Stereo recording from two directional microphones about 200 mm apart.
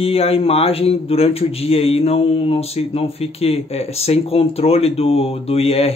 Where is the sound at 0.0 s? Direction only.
30° left (ahead or behind).